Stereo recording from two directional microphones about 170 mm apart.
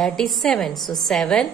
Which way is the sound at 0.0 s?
5° left (ahead or behind).